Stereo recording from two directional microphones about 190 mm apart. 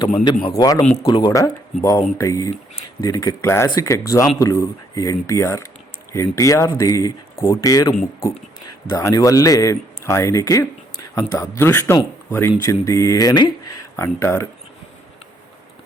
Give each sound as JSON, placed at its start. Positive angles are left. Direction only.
{"t": 0.4, "sound": "a man's voice", "side_deg": 20}